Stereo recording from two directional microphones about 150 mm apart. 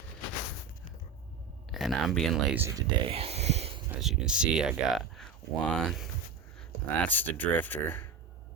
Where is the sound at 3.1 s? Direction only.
40° right (ahead or behind).